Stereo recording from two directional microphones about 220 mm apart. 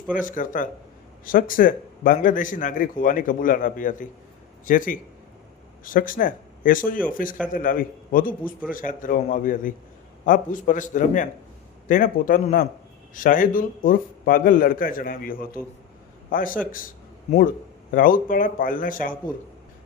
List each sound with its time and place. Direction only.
0.1 s a man's voice: 35° left (ahead or behind)
17.9 s a man's voice: 40° left (ahead or behind)